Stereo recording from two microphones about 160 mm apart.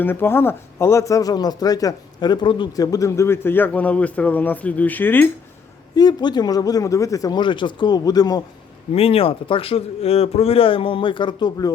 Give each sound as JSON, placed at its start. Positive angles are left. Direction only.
{"t": 0.0, "sound": "speech", "side_deg": 15}
{"t": 6.0, "sound": "speech", "side_deg": 25}
{"t": 8.9, "sound": "speech", "side_deg": 35}